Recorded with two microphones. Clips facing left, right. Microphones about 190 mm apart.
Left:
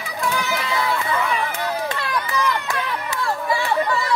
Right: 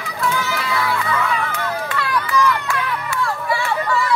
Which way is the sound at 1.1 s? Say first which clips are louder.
Right 1 dB; 25° left (ahead or behind).